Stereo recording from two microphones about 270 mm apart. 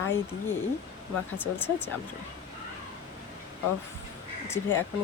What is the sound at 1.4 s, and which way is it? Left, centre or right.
Speech, centre.